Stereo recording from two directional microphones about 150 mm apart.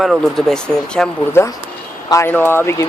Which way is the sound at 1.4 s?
15° left (ahead or behind).